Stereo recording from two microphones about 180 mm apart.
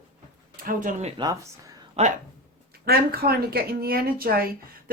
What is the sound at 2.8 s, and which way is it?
Speech, 60° right (ahead or behind).